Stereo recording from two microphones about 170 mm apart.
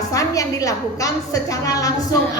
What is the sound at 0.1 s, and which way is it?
A woman's voice, 20° left (ahead or behind).